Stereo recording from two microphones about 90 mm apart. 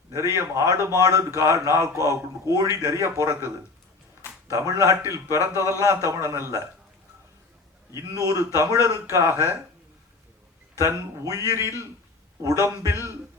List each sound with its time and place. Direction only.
0.1 s a man's voice: 35° right (ahead or behind)
7.9 s a man's voice: 40° right (ahead or behind)
10.8 s a man's voice: 35° right (ahead or behind)
12.9 s music: 30° right (ahead or behind)